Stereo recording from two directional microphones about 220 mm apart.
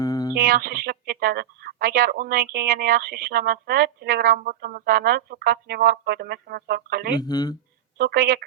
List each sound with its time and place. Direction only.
0.0 s music: 15° left (ahead or behind)
0.3 s speech: 45° right (ahead or behind)
7.2 s speech: 20° left (ahead or behind)
7.9 s speech: 45° right (ahead or behind)